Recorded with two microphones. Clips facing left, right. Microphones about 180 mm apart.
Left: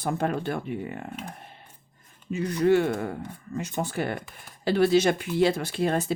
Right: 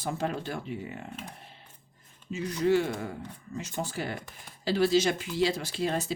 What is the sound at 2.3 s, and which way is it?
Speech, 60° left (ahead or behind).